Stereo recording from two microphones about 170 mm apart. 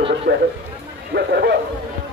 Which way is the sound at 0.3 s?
65° right (ahead or behind).